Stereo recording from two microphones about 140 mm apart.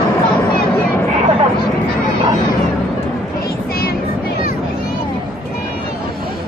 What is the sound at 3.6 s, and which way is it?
Child singing, 90° left.